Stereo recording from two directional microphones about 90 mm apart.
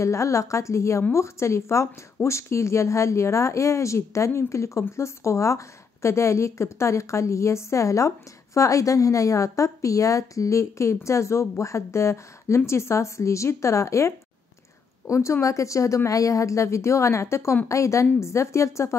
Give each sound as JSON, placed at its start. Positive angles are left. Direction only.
{"t": 0.0, "sound": "a woman's voice", "side_deg": 35}